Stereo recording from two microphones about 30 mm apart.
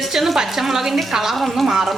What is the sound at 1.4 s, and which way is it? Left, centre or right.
Speech, centre.